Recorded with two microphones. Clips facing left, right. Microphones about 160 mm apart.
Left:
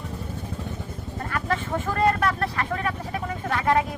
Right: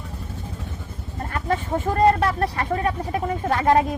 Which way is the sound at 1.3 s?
30° right (ahead or behind).